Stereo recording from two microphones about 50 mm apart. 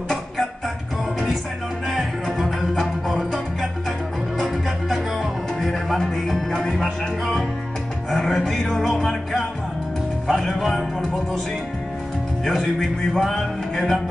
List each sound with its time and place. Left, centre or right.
1.9 s music: centre
4.4 s music: centre
8.1 s music: centre
10.3 s music: centre
12.4 s music: centre